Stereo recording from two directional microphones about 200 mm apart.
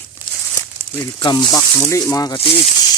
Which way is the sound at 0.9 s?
20° left (ahead or behind).